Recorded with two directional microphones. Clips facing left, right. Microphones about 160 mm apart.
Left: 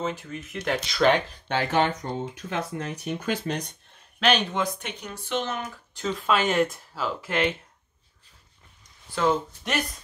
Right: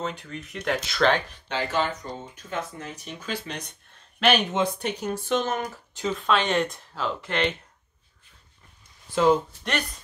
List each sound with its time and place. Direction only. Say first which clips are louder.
0.0 s speech: left 2 dB; 5° left (ahead or behind)
1.5 s speech: left 3 dB; 60° left (ahead or behind)
4.2 s speech: right 1 dB; 5° right (ahead or behind)
4.5 s speech: right 3 dB; 25° right (ahead or behind); by 5.6 s 45° right (ahead or behind)
6.1 s speech: left 1 dB; 5° left (ahead or behind)
9.1 s speech: right 4 dB; 15° right (ahead or behind)